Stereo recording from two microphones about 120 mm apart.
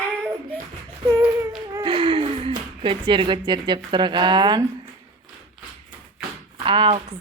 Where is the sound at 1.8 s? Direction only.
45° right (ahead or behind).